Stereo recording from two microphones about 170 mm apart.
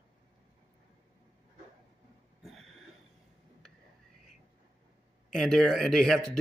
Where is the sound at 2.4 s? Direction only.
Centre (ahead or behind).